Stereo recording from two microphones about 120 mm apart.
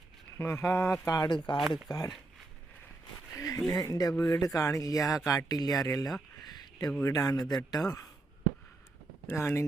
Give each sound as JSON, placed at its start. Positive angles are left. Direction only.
{"t": 0.3, "sound": "speech", "side_deg": 20}
{"t": 3.3, "sound": "a sound", "side_deg": 30}
{"t": 3.7, "sound": "speech", "side_deg": 30}
{"t": 6.5, "sound": "a sound", "side_deg": 30}
{"t": 7.0, "sound": "speech", "side_deg": 30}
{"t": 9.2, "sound": "speech", "side_deg": 20}